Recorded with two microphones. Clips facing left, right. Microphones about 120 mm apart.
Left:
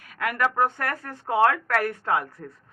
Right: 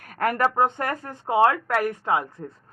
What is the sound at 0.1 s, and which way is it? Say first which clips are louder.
Speech: right 3 dB; 40° right (ahead or behind).